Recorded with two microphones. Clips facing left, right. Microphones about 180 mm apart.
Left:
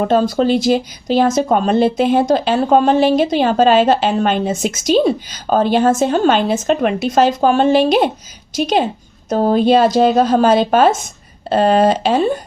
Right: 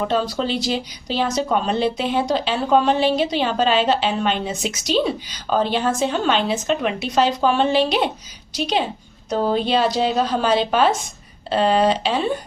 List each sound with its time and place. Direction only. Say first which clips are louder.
0.0 s speech: left 7 dB; 50° left (ahead or behind)